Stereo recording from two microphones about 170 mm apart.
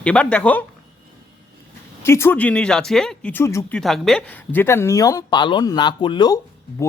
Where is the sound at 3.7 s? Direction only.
Centre (ahead or behind).